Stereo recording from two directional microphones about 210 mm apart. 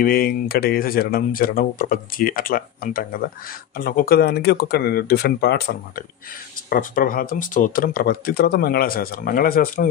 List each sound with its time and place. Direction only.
0.0 s speech: 45° left (ahead or behind)
6.7 s speech: 40° left (ahead or behind)